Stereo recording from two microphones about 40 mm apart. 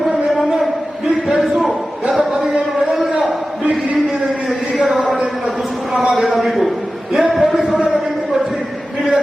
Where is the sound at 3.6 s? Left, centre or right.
Right.